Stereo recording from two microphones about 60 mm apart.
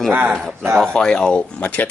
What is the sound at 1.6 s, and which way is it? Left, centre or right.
Speech, left.